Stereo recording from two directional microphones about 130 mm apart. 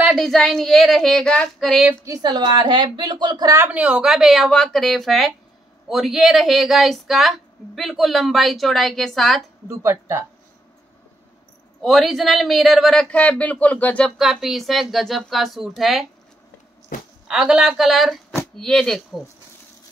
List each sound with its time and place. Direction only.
0.1 s speech: centre (ahead or behind)
2.0 s a woman's voice: 30° right (ahead or behind)
3.5 s speech: 15° right (ahead or behind); by 9.4 s centre (ahead or behind)
9.7 s speech: 20° right (ahead or behind)
11.8 s speech: centre (ahead or behind)
13.1 s speech: 10° left (ahead or behind)
14.1 s speech: centre (ahead or behind)
16.9 s a sound: 90° left
17.3 s speech: 5° right (ahead or behind)